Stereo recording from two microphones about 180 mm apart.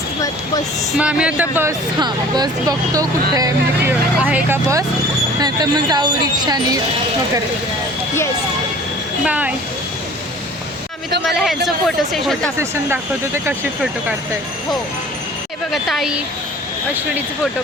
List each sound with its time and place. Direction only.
0.9 s speech: 5° right (ahead or behind)
2.0 s speech: 25° right (ahead or behind)
3.8 s speech: 10° right (ahead or behind)
9.2 s speech: 5° right (ahead or behind)
12.1 s speech: centre (ahead or behind)
12.5 s speech: 15° right (ahead or behind)
15.7 s speech: centre (ahead or behind)